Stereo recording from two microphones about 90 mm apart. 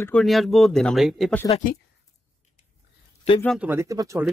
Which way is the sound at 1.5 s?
90° left.